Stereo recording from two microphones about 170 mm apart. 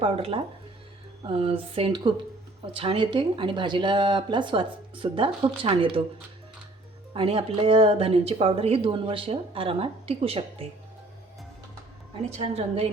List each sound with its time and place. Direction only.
0.0 s speech: 35° right (ahead or behind)
7.1 s speech: 35° right (ahead or behind)
12.2 s speech: 40° right (ahead or behind)